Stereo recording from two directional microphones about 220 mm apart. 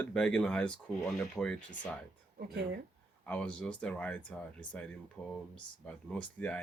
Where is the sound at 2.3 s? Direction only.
45° right (ahead or behind).